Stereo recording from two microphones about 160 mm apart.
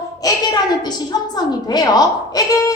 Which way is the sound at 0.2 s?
25° left (ahead or behind).